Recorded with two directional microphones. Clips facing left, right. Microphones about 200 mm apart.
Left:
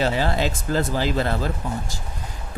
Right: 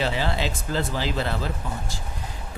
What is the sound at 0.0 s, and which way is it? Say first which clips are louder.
Speech: left 4 dB; 45° left (ahead or behind).